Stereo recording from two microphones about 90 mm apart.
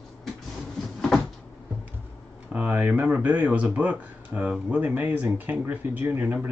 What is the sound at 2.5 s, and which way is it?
Speech, 20° right (ahead or behind).